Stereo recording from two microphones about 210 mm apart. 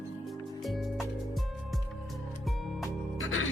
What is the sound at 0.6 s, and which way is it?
Music, centre (ahead or behind).